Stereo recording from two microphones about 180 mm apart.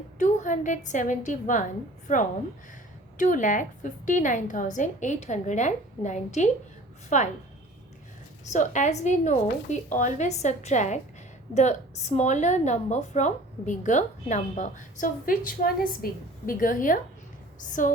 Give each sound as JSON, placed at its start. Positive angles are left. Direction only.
{"t": 0.2, "sound": "a woman's voice", "side_deg": 45}
{"t": 8.4, "sound": "a woman's voice", "side_deg": 45}